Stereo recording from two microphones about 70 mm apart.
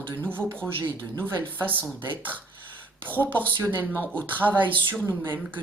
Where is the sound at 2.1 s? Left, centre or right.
Right.